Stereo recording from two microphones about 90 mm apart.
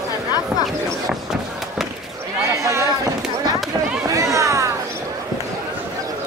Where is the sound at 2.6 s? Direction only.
35° right (ahead or behind).